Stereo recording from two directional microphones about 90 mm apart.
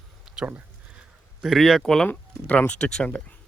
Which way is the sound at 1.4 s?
Centre (ahead or behind).